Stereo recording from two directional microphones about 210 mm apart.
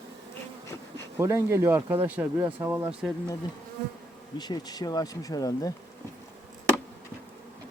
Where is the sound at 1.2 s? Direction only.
15° right (ahead or behind).